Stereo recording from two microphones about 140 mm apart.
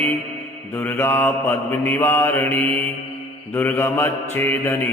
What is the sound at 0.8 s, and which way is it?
Mantra, 15° left (ahead or behind).